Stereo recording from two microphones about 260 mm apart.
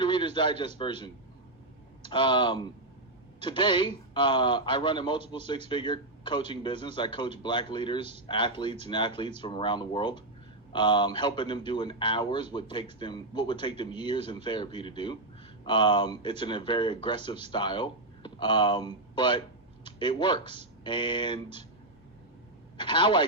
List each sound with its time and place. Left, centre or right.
0.0 s a sound: centre
0.8 s speech: centre
22.8 s a man's voice: centre